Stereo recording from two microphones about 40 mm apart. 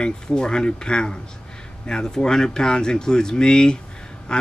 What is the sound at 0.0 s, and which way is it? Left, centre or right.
Speech, left.